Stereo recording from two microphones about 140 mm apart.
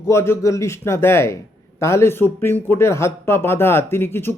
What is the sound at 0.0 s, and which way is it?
A man's voice, 20° left (ahead or behind).